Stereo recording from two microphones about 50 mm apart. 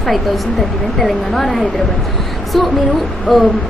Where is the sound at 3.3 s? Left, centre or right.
Centre.